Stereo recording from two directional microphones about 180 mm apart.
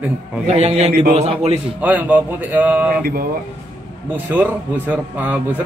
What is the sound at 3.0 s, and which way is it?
Speech, 55° right (ahead or behind).